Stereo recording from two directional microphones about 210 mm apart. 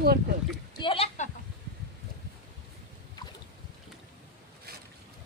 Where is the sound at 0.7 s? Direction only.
25° left (ahead or behind).